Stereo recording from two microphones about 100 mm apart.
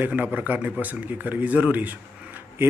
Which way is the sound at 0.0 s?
15° right (ahead or behind).